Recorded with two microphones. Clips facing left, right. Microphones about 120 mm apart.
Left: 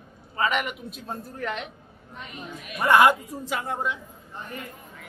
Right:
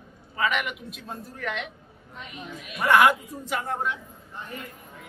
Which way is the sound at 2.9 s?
25° left (ahead or behind).